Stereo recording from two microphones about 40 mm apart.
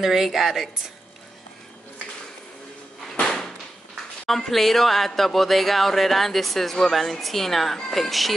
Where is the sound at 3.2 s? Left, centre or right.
Centre.